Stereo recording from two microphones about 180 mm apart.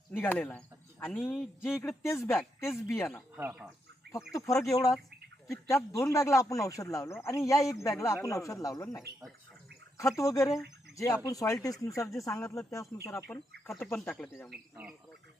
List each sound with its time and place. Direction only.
0.1 s speech: 10° left (ahead or behind)
2.0 s speech: 15° left (ahead or behind)
3.3 s speech: 10° right (ahead or behind)
4.3 s speech: 20° left (ahead or behind)
10.0 s speech: 15° left (ahead or behind)